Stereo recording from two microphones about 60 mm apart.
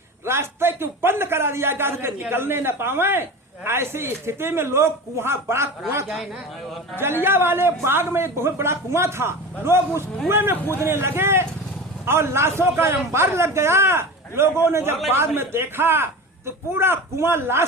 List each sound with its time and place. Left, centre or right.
0.3 s a man's voice: right
6.9 s a man's voice: right